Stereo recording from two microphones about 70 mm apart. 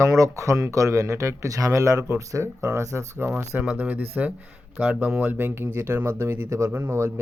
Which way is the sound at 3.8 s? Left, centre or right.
Right.